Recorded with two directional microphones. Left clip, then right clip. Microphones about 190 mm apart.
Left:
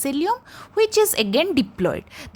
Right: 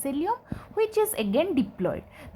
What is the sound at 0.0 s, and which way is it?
A woman's voice, 35° left (ahead or behind).